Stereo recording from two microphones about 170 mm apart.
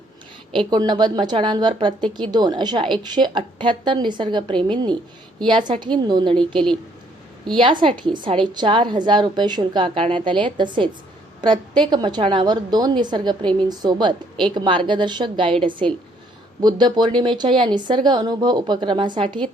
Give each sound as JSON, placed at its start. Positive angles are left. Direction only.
{"t": 0.7, "sound": "speech", "side_deg": -25}
{"t": 7.5, "sound": "speech", "side_deg": -30}